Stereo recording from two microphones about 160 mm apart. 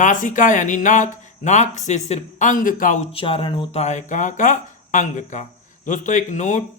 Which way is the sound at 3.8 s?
50° left (ahead or behind).